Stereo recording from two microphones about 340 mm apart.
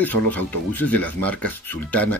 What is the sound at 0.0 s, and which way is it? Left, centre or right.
Speech, centre.